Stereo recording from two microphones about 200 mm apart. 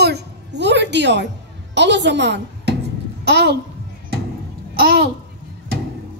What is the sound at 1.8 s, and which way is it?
A child's voice, 60° right (ahead or behind).